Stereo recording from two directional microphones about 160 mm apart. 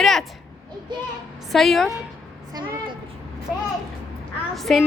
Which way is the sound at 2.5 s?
30° right (ahead or behind).